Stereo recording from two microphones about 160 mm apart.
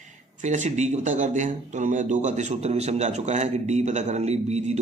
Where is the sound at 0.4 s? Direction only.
50° right (ahead or behind).